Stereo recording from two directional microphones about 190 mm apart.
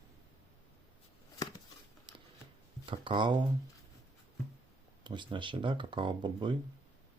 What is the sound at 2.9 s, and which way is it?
Speech, 25° right (ahead or behind).